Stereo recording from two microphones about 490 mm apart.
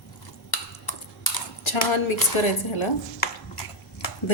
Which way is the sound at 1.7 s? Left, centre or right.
Left.